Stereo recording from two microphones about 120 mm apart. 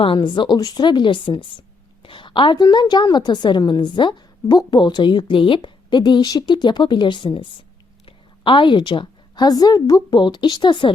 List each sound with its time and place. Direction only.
0.0 s a woman's voice: 45° left (ahead or behind)